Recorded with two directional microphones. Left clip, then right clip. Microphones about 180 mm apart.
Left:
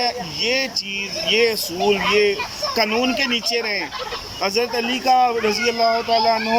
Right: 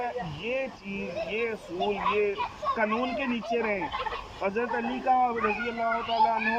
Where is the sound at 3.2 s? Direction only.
60° left (ahead or behind).